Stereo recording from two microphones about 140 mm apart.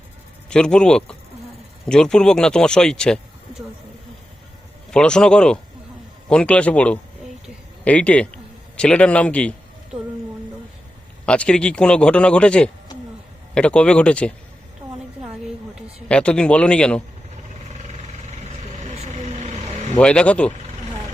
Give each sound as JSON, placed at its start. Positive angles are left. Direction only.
{"t": 0.5, "sound": "speech", "side_deg": 5}
{"t": 4.9, "sound": "a man's voice", "side_deg": 5}
{"t": 11.3, "sound": "a man's voice", "side_deg": 5}
{"t": 15.2, "sound": "a sound", "side_deg": -5}
{"t": 16.0, "sound": "a man's voice", "side_deg": 5}
{"t": 18.3, "sound": "vehicle", "side_deg": -55}
{"t": 20.0, "sound": "a man's voice", "side_deg": 5}